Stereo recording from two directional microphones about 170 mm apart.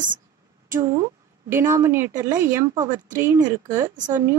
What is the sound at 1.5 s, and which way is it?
Speech, 15° right (ahead or behind).